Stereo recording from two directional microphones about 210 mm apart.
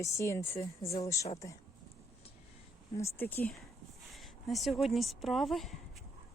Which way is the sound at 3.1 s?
10° left (ahead or behind).